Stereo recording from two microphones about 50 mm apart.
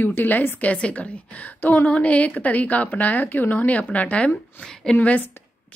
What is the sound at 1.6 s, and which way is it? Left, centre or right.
Speech, left.